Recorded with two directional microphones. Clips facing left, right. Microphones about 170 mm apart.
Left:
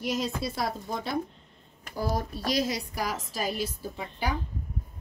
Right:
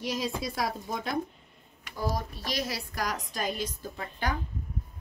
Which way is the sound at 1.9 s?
40° left (ahead or behind).